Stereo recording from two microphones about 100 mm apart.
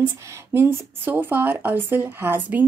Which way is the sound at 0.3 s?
25° right (ahead or behind).